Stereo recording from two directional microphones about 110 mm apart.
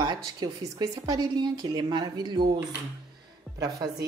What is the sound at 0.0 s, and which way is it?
A woman's voice, 40° right (ahead or behind).